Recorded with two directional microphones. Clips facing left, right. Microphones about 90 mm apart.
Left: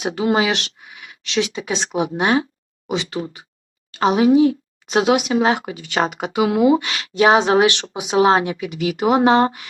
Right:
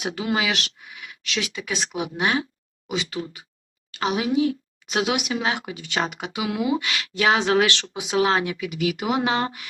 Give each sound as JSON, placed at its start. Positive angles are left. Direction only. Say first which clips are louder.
{"t": 0.0, "sound": "speech", "louder": "left 6 dB", "side_deg": 30}